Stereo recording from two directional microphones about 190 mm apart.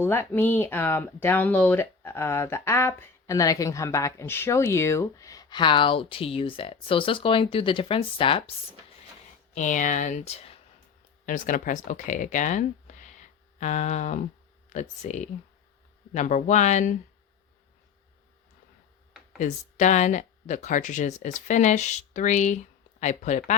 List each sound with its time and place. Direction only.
0.0 s speech: 10° left (ahead or behind); by 8.4 s 30° left (ahead or behind)
9.6 s speech: 40° left (ahead or behind)
11.3 s speech: 45° left (ahead or behind)
19.4 s speech: 40° left (ahead or behind)